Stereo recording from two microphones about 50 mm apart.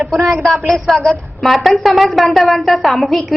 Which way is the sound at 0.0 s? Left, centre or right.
Centre.